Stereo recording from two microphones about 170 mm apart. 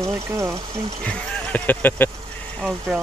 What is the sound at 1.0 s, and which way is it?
Speech, 10° left (ahead or behind).